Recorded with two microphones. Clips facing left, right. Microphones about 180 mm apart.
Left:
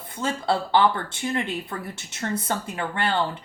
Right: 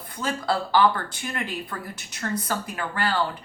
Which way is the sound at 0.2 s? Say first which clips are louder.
Left 1 dB; 25° left (ahead or behind).